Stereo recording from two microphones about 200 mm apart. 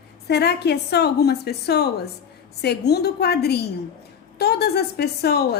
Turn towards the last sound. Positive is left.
turn(degrees=55)  # may be behind; listen again after turning